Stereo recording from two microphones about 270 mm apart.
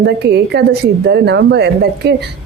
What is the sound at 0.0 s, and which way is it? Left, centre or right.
A woman's voice, right.